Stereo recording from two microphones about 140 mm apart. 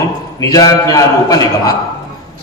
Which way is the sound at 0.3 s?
25° left (ahead or behind).